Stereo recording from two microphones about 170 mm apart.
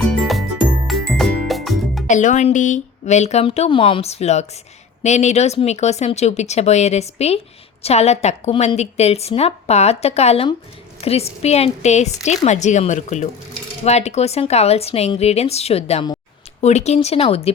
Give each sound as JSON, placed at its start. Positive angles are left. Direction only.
{"t": 0.0, "sound": "music", "side_deg": 0}
{"t": 2.0, "sound": "a woman's voice", "side_deg": 45}